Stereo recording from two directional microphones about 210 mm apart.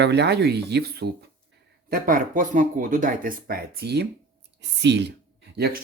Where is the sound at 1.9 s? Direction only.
40° right (ahead or behind).